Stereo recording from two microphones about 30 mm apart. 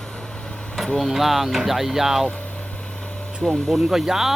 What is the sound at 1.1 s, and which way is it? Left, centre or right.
Speech, centre.